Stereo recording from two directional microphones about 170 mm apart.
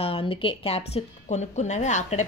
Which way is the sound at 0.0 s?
35° left (ahead or behind).